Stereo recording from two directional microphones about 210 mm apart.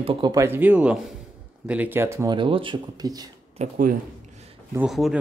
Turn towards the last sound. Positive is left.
turn(degrees=0)  # may be behind; listen again after turning